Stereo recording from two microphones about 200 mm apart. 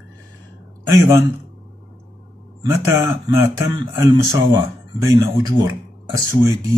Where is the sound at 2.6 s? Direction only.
15° right (ahead or behind).